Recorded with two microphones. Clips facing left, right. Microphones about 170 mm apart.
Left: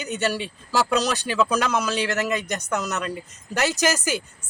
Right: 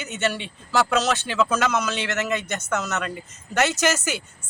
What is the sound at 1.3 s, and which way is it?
Speech, 15° left (ahead or behind).